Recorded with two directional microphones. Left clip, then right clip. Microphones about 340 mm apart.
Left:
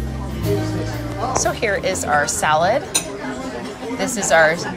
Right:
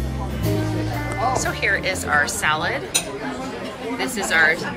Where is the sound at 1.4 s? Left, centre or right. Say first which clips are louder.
Left 2 dB; centre.